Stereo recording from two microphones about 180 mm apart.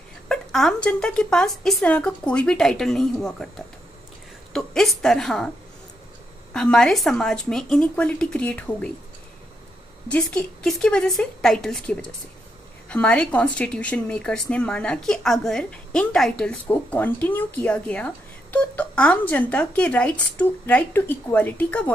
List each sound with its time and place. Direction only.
0.3 s a woman's voice: centre (ahead or behind)
6.5 s speech: 5° left (ahead or behind)
10.1 s speech: 5° left (ahead or behind)